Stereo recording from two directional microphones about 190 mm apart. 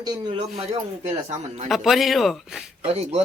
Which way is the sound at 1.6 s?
Centre (ahead or behind).